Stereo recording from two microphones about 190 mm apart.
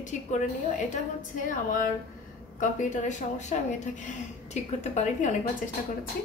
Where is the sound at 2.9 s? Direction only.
40° left (ahead or behind).